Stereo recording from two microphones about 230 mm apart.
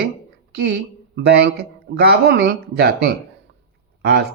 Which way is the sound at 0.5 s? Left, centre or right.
Right.